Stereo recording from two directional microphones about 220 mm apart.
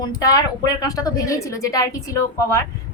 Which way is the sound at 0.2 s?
15° left (ahead or behind).